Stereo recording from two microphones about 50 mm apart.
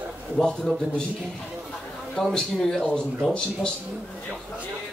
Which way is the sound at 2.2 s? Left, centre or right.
Centre.